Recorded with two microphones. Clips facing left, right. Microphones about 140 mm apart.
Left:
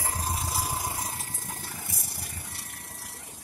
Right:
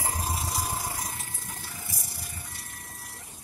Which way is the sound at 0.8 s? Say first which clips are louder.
Left 1 dB; 25° left (ahead or behind).